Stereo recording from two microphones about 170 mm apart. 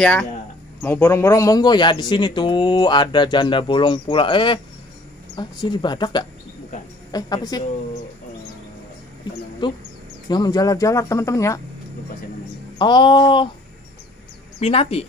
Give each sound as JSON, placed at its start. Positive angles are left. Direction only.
{"t": 0.0, "sound": "a man's voice", "side_deg": 5}
{"t": 9.3, "sound": "a man's voice", "side_deg": 25}
{"t": 12.7, "sound": "a man's voice", "side_deg": 25}
{"t": 14.6, "sound": "a woman's voice", "side_deg": 35}